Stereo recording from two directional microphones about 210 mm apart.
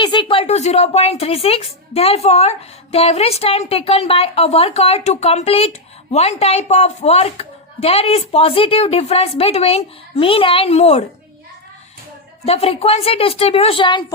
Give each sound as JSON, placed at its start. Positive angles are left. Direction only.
{"t": 0.0, "sound": "speech", "side_deg": 20}
{"t": 12.5, "sound": "speech", "side_deg": 30}